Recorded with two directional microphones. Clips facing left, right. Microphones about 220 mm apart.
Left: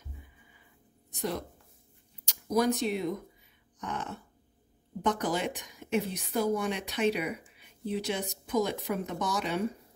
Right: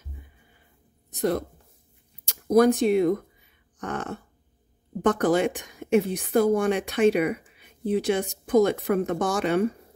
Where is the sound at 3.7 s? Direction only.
50° right (ahead or behind).